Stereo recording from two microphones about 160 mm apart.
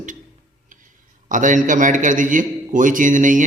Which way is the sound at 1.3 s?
55° right (ahead or behind).